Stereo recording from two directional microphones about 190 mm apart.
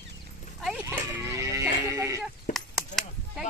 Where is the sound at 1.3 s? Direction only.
15° right (ahead or behind).